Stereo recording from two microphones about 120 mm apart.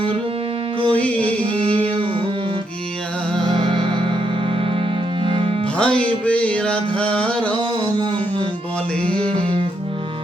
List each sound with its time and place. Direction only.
0.9 s music: 10° left (ahead or behind)
1.2 s music: 50° right (ahead or behind)
3.5 s music: 45° right (ahead or behind)
5.2 s music: 50° right (ahead or behind)
5.7 s music: 10° left (ahead or behind)
9.2 s music: 50° right (ahead or behind)